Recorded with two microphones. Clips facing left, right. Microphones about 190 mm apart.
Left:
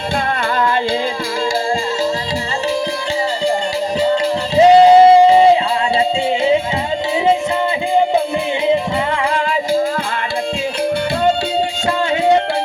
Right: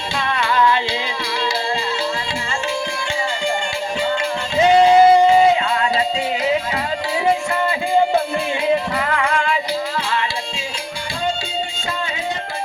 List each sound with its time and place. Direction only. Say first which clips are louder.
4.0 s music: left 6 dB; 35° left (ahead or behind)
8.6 s music: left 3 dB; 25° left (ahead or behind)
11.9 s music: left 14 dB; 65° left (ahead or behind)